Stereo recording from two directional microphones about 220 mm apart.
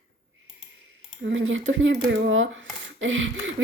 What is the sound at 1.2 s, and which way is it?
Speech, 60° right (ahead or behind).